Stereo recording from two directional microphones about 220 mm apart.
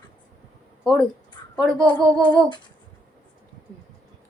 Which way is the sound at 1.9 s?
20° left (ahead or behind).